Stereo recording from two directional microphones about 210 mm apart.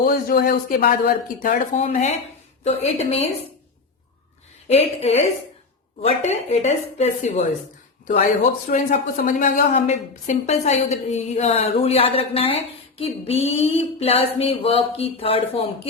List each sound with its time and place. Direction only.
0.0 s a woman's voice: 45° left (ahead or behind); by 3.2 s 30° left (ahead or behind)
4.7 s a woman's voice: 30° left (ahead or behind)
8.6 s a woman's voice: 40° left (ahead or behind)
13.0 s a sound: 30° left (ahead or behind)